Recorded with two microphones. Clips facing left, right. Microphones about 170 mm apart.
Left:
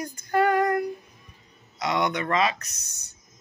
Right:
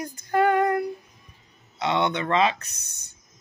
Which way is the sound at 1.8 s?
25° right (ahead or behind).